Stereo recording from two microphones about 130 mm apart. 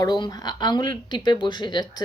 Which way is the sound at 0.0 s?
30° left (ahead or behind).